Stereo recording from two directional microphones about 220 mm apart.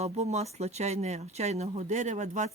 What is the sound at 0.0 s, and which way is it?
Speech, 30° right (ahead or behind).